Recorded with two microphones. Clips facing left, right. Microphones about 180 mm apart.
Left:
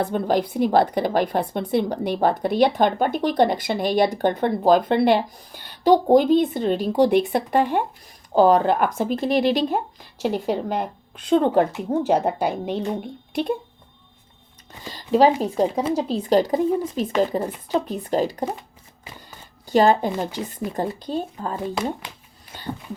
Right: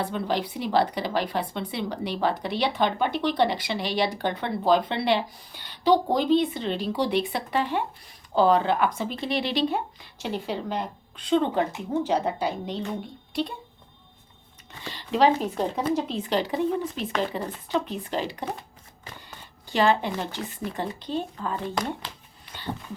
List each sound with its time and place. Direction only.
0.0 s a woman's voice: 50° left (ahead or behind)
14.8 s a woman's voice: 40° left (ahead or behind)
19.6 s a woman's voice: 40° left (ahead or behind)
21.8 s speech: 10° left (ahead or behind)